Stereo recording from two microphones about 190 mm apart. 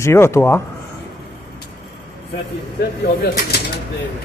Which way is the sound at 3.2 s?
55° left (ahead or behind).